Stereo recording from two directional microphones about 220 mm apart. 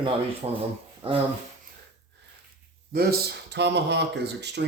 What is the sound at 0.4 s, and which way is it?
Speech, 25° right (ahead or behind).